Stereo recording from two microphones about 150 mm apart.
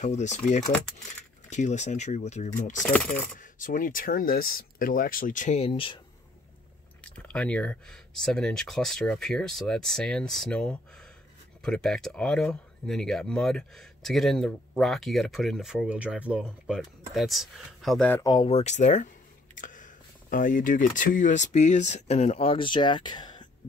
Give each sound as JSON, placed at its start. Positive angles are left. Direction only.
{"t": 0.0, "sound": "speech", "side_deg": 50}
{"t": 2.8, "sound": "a sound", "side_deg": 5}
{"t": 3.3, "sound": "speech", "side_deg": 65}
{"t": 7.2, "sound": "speech", "side_deg": 10}
{"t": 18.2, "sound": "speech", "side_deg": 30}
{"t": 18.5, "sound": "speech", "side_deg": 50}